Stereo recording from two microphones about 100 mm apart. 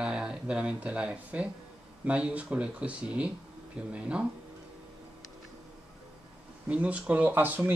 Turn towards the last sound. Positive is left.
turn(degrees=-20)  # may be behind; listen again after turning